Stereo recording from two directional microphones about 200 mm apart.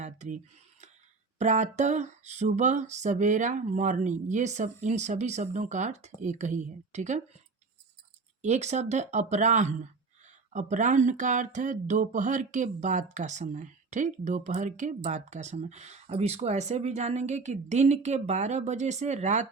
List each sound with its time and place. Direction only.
0.0 s a sound: 35° right (ahead or behind)
1.4 s speech: 35° right (ahead or behind)
8.4 s speech: 35° right (ahead or behind)